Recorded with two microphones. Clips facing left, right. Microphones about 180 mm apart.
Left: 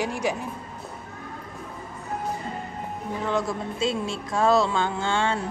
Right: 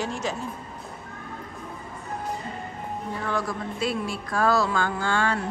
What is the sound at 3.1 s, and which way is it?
Speech, 20° left (ahead or behind).